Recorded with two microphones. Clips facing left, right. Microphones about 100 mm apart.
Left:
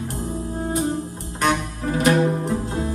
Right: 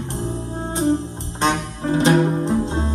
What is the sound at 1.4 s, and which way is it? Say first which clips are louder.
Music: right 1 dB; 25° right (ahead or behind).